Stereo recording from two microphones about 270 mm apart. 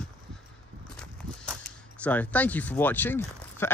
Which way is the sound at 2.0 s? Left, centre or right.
Centre.